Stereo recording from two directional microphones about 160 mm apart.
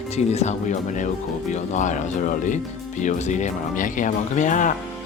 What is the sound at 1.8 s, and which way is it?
Speech, 50° left (ahead or behind).